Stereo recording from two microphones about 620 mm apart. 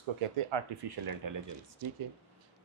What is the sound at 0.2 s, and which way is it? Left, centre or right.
Speech, right.